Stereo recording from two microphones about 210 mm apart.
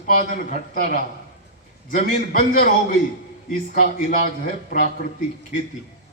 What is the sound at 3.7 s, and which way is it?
Speech, 45° left (ahead or behind).